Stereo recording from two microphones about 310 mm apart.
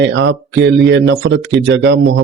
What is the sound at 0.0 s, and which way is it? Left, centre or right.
Speech, right.